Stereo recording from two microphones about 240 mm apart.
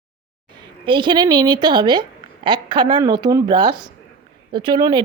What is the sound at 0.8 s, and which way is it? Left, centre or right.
A woman's voice, centre.